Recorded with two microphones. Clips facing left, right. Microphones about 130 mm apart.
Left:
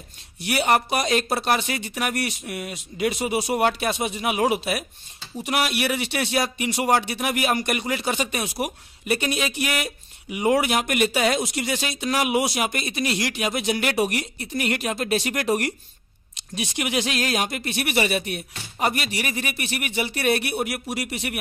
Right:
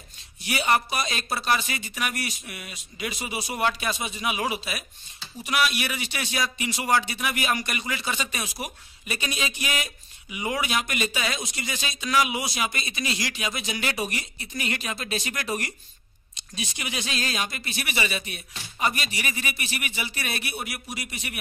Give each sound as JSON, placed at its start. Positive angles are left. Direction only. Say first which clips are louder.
{"t": 0.4, "sound": "speech", "louder": "left 3 dB", "side_deg": 60}